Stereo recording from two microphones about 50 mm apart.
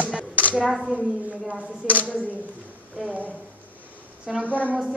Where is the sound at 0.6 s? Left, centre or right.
Centre.